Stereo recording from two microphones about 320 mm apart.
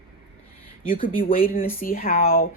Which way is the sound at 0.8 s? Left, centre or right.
Left.